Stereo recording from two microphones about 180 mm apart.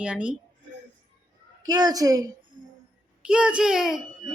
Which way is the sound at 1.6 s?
20° right (ahead or behind).